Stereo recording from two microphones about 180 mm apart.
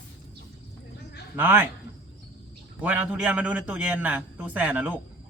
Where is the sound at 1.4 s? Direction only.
10° right (ahead or behind).